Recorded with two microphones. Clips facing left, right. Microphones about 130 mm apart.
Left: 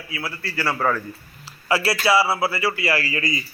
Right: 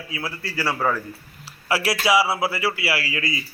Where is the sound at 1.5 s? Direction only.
5° right (ahead or behind).